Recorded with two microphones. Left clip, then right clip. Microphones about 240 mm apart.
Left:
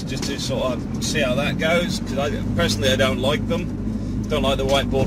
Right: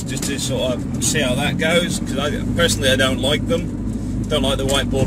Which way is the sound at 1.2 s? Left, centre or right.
Centre.